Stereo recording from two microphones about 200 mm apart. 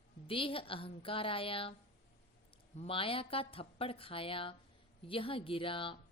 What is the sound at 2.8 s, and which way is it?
A woman's voice, 25° left (ahead or behind).